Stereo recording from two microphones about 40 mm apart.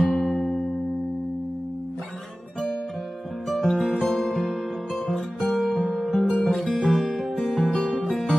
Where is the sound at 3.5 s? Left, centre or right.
Centre.